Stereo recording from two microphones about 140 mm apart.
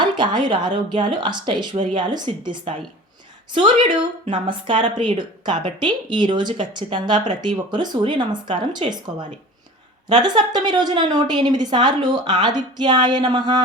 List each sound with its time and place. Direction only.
0.0 s a woman's voice: 30° right (ahead or behind)